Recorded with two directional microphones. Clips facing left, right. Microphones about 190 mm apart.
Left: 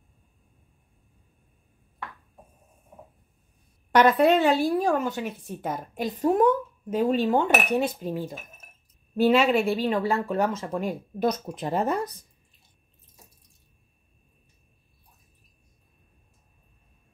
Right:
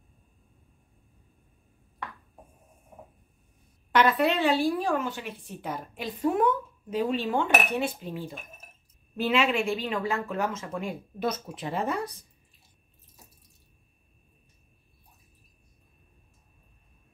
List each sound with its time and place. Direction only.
3.9 s speech: 45° left (ahead or behind)